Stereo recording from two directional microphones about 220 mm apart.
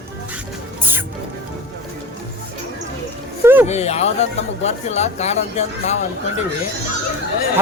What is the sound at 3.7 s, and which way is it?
Speech, 30° left (ahead or behind).